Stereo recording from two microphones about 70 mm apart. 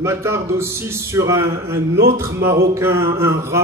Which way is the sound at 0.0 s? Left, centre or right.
Right.